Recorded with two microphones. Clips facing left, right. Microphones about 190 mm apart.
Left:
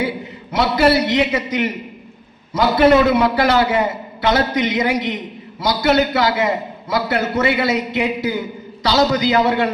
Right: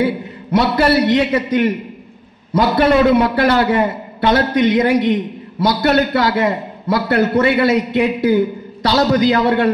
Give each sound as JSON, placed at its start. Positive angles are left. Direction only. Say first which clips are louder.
{"t": 0.0, "sound": "a man's voice", "louder": "right 5 dB", "side_deg": -55}
{"t": 3.2, "sound": "a man's voice", "louder": "right 1 dB", "side_deg": -55}